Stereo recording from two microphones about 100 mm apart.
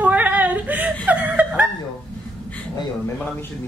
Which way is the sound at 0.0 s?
15° right (ahead or behind).